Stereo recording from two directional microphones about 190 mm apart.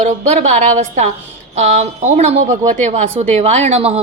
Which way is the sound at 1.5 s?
35° right (ahead or behind).